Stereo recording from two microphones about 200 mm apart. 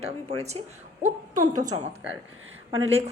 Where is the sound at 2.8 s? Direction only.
30° right (ahead or behind).